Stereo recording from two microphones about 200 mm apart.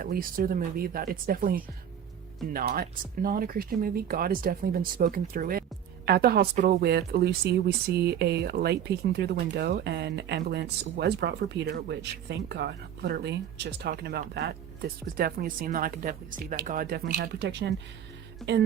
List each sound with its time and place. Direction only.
0.0 s speech: 45° right (ahead or behind)
18.4 s music: centre (ahead or behind)